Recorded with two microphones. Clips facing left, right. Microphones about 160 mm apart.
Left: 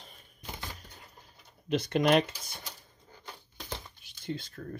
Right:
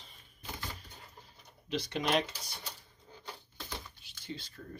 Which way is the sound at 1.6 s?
55° left (ahead or behind).